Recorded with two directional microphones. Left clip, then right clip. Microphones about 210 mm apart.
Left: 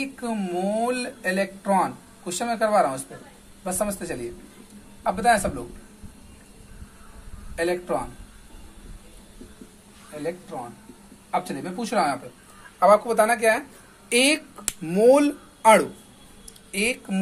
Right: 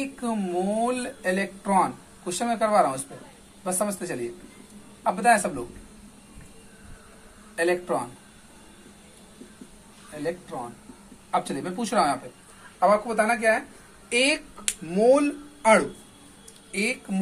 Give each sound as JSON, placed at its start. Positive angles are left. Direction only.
{"t": 0.2, "sound": "a man's voice", "side_deg": 25}
{"t": 7.5, "sound": "speech", "side_deg": 15}
{"t": 10.2, "sound": "speech", "side_deg": 10}
{"t": 12.7, "sound": "speech", "side_deg": 35}